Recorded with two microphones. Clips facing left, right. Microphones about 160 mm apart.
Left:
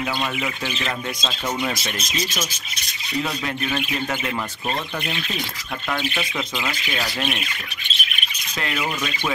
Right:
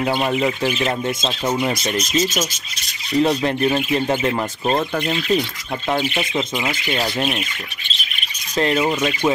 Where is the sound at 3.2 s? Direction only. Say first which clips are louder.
Right 11 dB; 30° right (ahead or behind).